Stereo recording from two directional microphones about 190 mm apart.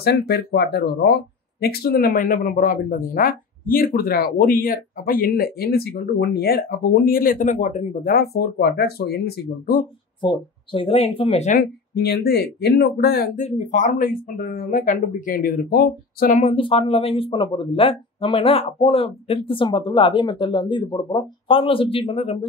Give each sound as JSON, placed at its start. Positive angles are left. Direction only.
{"t": 0.0, "sound": "speech", "side_deg": 60}
{"t": 10.2, "sound": "speech", "side_deg": 25}
{"t": 11.9, "sound": "speech", "side_deg": 60}
{"t": 13.4, "sound": "speech", "side_deg": 40}
{"t": 16.5, "sound": "speech", "side_deg": 30}